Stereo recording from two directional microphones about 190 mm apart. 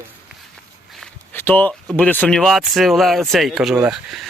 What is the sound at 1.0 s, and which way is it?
Speech, 10° left (ahead or behind).